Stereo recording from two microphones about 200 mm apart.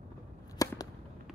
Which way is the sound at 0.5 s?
20° left (ahead or behind).